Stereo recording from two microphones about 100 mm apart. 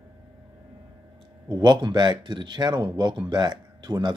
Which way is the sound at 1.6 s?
50° right (ahead or behind).